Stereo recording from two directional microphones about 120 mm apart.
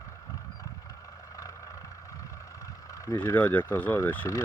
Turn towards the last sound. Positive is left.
turn(degrees=20)  # may be behind; listen again after turning